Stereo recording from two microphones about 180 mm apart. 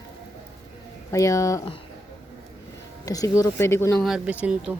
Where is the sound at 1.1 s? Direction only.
15° left (ahead or behind).